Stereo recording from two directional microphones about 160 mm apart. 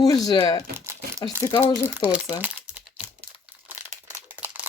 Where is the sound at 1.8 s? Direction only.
10° right (ahead or behind).